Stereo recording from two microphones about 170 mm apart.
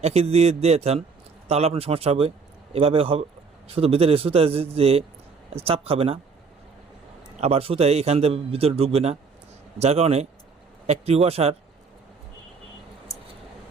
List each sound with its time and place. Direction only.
0.0 s a man's voice: 40° right (ahead or behind)
7.3 s a man's voice: 40° right (ahead or behind)